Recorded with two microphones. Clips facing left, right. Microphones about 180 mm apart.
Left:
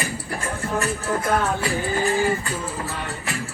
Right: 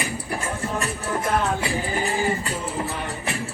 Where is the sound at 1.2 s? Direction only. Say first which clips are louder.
Even; 20° right (ahead or behind).